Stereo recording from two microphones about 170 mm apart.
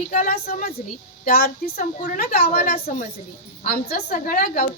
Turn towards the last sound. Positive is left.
turn(degrees=55)  # may be behind; listen again after turning